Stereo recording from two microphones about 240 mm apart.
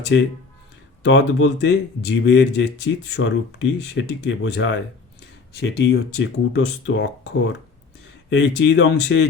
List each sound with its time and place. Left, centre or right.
0.1 s speech: left